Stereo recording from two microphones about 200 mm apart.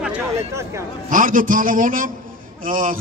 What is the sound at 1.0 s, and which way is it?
A man's voice, 40° right (ahead or behind).